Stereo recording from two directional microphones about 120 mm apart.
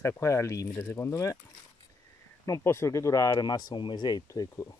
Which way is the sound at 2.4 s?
25° left (ahead or behind).